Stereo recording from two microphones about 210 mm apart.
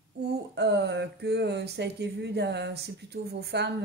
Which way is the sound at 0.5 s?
55° right (ahead or behind).